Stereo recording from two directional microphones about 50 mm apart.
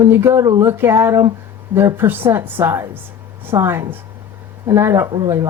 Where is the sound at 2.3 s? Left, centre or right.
Right.